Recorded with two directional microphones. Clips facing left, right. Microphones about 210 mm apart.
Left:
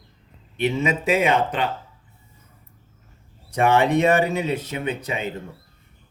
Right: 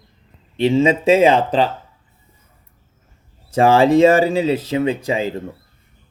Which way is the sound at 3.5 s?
90° right.